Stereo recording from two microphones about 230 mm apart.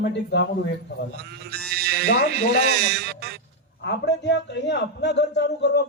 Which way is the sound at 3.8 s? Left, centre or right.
Left.